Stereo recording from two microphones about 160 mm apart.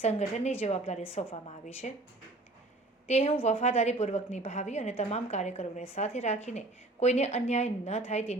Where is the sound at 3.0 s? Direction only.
40° left (ahead or behind).